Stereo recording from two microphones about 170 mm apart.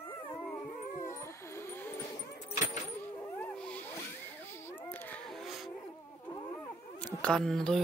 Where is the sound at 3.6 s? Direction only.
10° left (ahead or behind).